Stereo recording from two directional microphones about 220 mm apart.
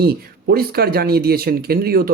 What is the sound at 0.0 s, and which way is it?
Speech, 45° right (ahead or behind).